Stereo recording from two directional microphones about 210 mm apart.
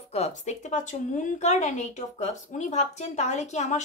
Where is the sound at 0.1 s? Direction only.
35° left (ahead or behind).